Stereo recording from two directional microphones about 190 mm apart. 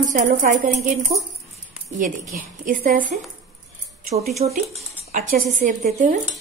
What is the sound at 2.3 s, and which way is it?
Speech, 45° right (ahead or behind).